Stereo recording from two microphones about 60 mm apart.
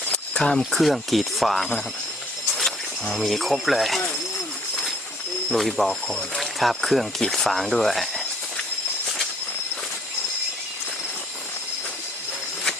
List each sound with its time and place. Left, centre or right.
0.0 s a sound: left
0.7 s speech: centre
5.5 s speech: centre